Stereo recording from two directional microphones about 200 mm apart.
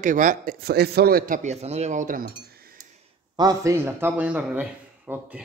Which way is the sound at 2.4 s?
50° right (ahead or behind).